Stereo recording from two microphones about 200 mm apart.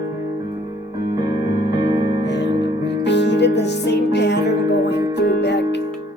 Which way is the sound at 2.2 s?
60° left (ahead or behind).